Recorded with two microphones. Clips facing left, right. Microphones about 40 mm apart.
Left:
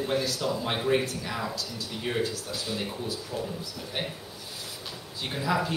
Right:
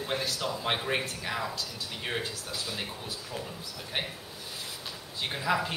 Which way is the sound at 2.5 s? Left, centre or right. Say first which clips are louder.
Left 3 dB; centre.